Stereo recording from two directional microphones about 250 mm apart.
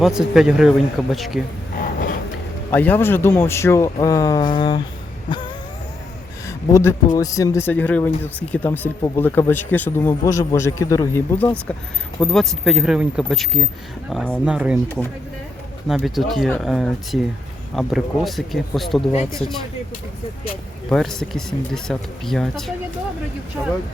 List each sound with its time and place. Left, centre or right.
0.0 s speech: centre
1.7 s a sound: left
2.6 s speech: centre
6.5 s speech: centre
15.9 s speech: centre
19.4 s speech: left
20.9 s speech: centre